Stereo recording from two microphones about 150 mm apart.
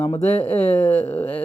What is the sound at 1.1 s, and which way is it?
Speech, 10° left (ahead or behind).